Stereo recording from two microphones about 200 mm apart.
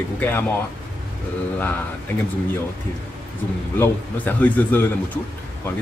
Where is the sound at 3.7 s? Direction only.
10° left (ahead or behind).